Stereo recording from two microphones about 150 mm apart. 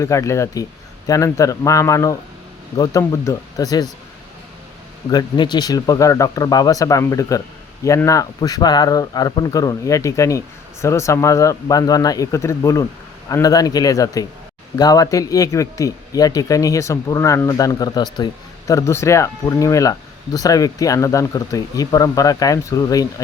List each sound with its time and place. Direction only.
0.0 s speech: 20° left (ahead or behind)
5.1 s speech: 30° left (ahead or behind)